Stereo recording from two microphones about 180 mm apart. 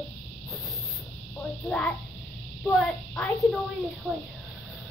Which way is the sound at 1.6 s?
5° left (ahead or behind).